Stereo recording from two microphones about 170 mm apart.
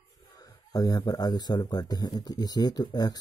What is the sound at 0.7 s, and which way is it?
Speech, 20° left (ahead or behind).